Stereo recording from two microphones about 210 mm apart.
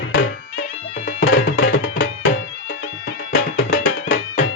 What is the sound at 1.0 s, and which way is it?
Music, 55° left (ahead or behind).